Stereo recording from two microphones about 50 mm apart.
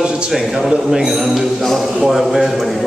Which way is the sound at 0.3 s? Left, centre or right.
Centre.